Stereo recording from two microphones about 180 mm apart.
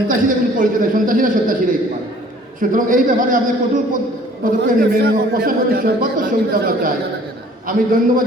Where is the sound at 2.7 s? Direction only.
50° right (ahead or behind).